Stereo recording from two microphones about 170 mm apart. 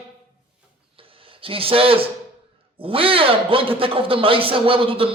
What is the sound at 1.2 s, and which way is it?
A man's voice, 30° right (ahead or behind).